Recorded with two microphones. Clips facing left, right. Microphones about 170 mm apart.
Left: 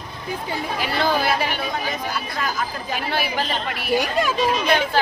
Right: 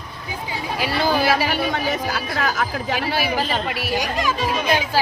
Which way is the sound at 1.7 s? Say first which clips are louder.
Right 3 dB; 75° right (ahead or behind).